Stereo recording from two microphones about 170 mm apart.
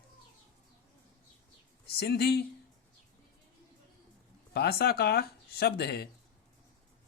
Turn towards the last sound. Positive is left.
turn(degrees=70)  # may be behind; listen again after turning